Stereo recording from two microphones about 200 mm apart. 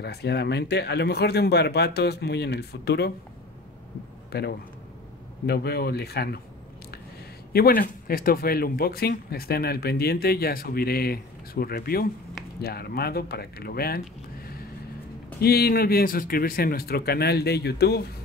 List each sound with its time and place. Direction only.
0.0 s speech: 55° left (ahead or behind)
4.3 s a man's voice: 55° left (ahead or behind)
7.5 s speech: 45° left (ahead or behind)